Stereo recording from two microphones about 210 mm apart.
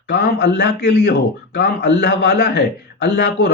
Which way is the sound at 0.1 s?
50° left (ahead or behind).